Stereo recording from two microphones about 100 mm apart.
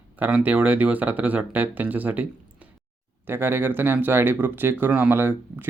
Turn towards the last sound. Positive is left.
turn(degrees=-20)  # may be behind; listen again after turning